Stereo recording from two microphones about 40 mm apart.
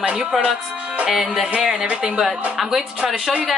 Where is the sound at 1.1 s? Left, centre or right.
Centre.